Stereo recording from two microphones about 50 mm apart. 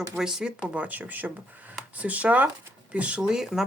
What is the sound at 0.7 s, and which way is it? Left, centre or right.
Speech, right.